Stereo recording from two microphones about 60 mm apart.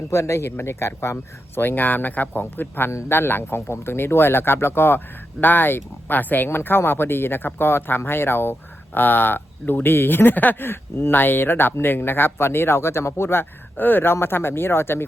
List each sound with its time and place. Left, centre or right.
0.1 s speech: left
1.6 s speech: left